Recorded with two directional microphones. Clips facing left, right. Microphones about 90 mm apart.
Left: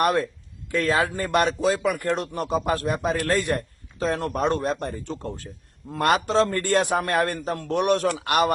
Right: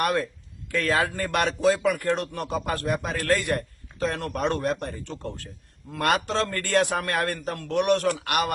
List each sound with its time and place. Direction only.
0.0 s a man's voice: 25° left (ahead or behind)